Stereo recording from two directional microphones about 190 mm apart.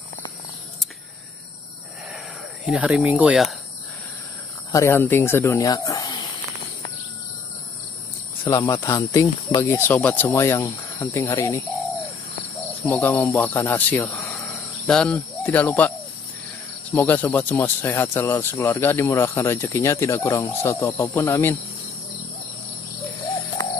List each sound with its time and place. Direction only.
2.6 s speech: 5° right (ahead or behind)
4.7 s speech: 10° left (ahead or behind)
8.5 s speech: 20° left (ahead or behind)
12.8 s speech: 10° left (ahead or behind)
16.9 s speech: 10° left (ahead or behind)